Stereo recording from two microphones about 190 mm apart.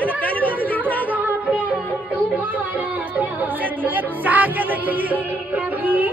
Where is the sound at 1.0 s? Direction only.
10° right (ahead or behind).